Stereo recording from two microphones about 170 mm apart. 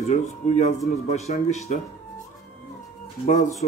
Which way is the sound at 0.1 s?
40° left (ahead or behind).